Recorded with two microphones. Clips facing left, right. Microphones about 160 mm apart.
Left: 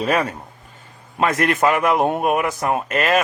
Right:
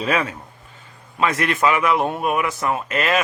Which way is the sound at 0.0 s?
45° left (ahead or behind).